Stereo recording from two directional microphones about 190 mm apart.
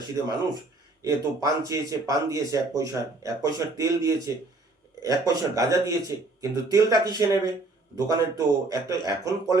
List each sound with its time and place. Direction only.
1.0 s speech: 15° right (ahead or behind)